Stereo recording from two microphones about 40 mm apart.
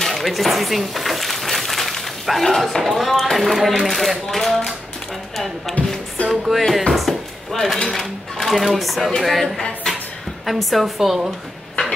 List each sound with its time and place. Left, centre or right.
0.1 s speech: centre
6.2 s music: left
6.5 s speech: centre
9.9 s a sound: centre
10.4 s speech: centre